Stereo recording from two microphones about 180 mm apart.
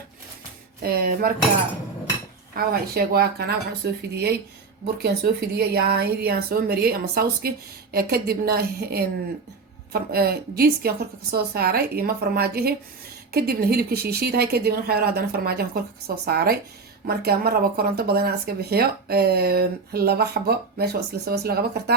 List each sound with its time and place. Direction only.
0.8 s speech: 60° right (ahead or behind)
2.6 s speech: 55° right (ahead or behind)